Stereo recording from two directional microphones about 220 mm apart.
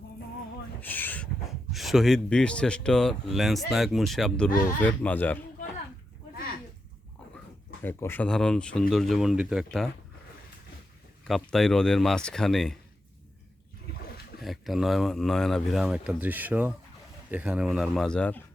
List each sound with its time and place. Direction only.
0.8 s a sound: 10° left (ahead or behind)
1.7 s speech: centre (ahead or behind)
7.9 s speech: 10° left (ahead or behind)
11.3 s speech: centre (ahead or behind)
14.4 s speech: centre (ahead or behind)